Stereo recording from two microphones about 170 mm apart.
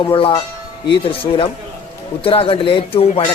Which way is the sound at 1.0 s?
30° left (ahead or behind).